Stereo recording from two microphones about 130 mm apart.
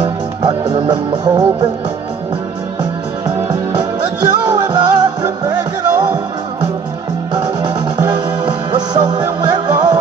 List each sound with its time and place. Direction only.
0.0 s music: 30° right (ahead or behind)
3.4 s music: 35° right (ahead or behind)
7.3 s music: 35° right (ahead or behind)